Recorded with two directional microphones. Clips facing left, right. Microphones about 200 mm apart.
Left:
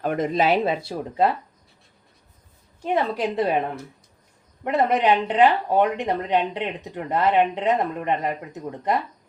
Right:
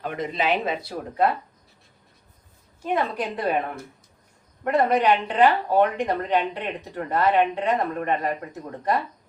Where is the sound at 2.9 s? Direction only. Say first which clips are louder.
Left 2 dB; 25° left (ahead or behind).